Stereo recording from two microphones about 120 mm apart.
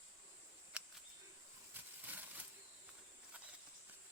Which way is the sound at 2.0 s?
15° right (ahead or behind).